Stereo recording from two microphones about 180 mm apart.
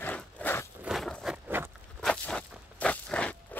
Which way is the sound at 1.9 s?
5° left (ahead or behind).